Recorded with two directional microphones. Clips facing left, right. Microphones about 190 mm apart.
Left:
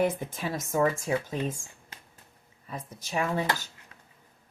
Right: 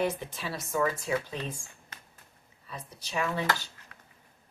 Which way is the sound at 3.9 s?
25° left (ahead or behind).